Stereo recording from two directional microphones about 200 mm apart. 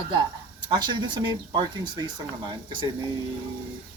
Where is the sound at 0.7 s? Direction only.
20° right (ahead or behind).